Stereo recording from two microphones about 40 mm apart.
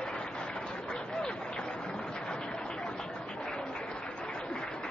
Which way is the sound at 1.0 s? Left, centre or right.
Left.